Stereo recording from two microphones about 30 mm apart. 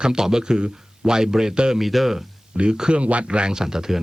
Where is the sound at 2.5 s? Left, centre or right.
Right.